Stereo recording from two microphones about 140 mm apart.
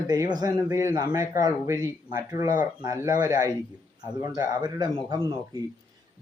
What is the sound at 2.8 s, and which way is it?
Speech, 25° right (ahead or behind).